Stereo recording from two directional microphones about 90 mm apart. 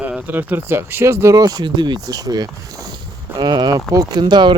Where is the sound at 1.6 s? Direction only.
60° right (ahead or behind).